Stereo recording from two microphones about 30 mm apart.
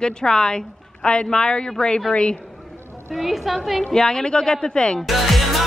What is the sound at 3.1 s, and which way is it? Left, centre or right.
Speech, centre.